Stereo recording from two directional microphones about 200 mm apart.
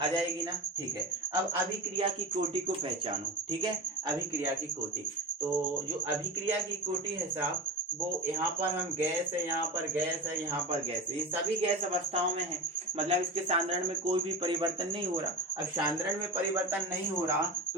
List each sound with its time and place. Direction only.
13.1 s speech: 30° right (ahead or behind)